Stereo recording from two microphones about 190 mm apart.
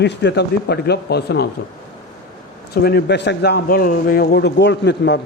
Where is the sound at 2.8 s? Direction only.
60° left (ahead or behind).